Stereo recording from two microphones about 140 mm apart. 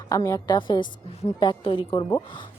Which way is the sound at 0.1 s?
25° left (ahead or behind).